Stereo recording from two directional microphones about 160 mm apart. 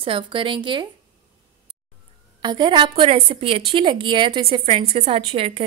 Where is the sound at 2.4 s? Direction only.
30° right (ahead or behind).